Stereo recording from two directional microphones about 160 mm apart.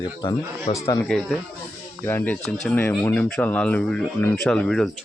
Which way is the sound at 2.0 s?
10° left (ahead or behind).